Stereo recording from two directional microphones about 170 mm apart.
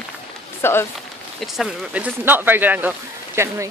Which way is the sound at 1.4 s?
Centre (ahead or behind).